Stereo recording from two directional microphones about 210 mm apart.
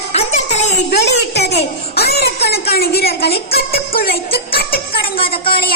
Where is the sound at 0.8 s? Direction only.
50° left (ahead or behind).